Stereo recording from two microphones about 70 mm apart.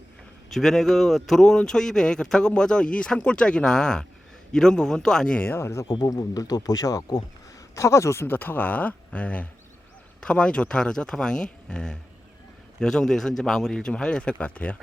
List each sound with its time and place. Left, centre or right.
0.5 s speech: centre
5.4 s speech: left
5.8 s speech: left
6.1 s speech: left
7.8 s speech: left
8.4 s speech: left